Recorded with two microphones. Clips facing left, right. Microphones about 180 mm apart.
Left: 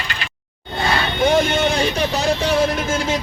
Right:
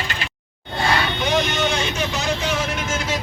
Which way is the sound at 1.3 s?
50° left (ahead or behind).